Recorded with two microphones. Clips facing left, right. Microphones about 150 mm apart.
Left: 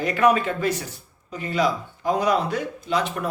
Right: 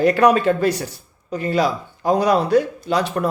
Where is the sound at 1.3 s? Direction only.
35° right (ahead or behind).